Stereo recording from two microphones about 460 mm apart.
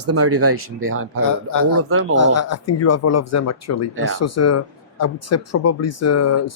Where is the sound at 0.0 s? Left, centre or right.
Right.